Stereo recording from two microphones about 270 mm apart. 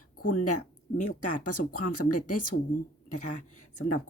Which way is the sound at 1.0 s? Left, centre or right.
Left.